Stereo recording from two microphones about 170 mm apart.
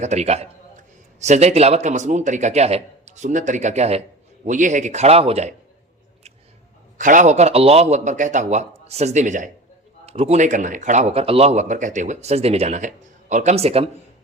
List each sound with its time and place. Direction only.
0.0 s a man's voice: 40° right (ahead or behind)
7.0 s a man's voice: 50° right (ahead or behind)